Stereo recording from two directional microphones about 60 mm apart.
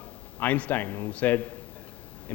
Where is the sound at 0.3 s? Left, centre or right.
Left.